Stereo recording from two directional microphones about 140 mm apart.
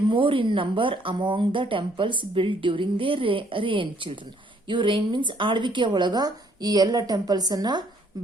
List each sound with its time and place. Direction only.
0.1 s a woman's voice: 40° right (ahead or behind)